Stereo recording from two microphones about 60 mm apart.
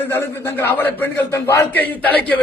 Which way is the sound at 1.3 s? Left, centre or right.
Left.